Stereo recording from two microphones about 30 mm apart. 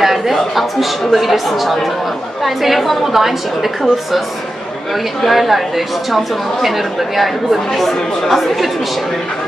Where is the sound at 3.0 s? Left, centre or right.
Centre.